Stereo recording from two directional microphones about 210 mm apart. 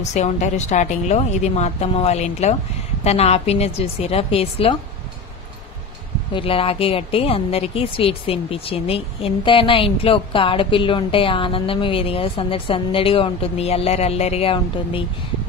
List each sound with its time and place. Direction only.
0.1 s a woman's voice: 35° left (ahead or behind)
6.3 s a woman's voice: 25° left (ahead or behind)